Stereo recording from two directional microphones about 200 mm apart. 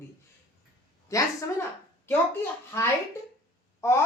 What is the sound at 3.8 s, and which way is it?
Speech, 15° left (ahead or behind).